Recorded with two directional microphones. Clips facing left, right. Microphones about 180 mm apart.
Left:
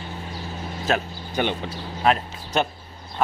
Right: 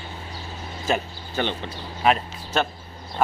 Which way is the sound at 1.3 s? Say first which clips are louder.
Left 2 dB; 15° left (ahead or behind).